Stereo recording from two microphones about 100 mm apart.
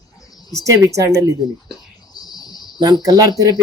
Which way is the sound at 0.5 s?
30° right (ahead or behind).